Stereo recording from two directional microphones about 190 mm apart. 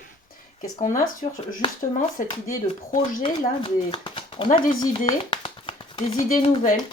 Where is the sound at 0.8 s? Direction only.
40° left (ahead or behind).